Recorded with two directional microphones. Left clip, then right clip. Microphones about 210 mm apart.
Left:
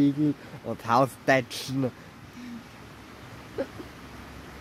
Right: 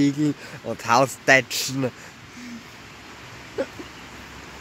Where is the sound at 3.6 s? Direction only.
45° right (ahead or behind).